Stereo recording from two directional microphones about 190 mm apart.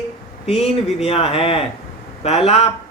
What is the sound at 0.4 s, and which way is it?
A man's voice, 30° left (ahead or behind).